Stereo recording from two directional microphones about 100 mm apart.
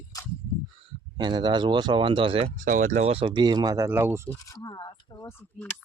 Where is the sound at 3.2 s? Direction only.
50° right (ahead or behind).